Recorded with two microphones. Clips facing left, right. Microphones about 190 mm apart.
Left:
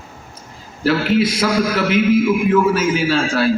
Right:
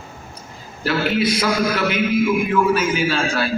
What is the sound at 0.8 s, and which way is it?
A man's voice, 90° left.